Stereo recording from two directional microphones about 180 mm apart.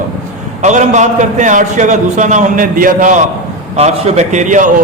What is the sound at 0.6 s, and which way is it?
A man's voice, 40° right (ahead or behind).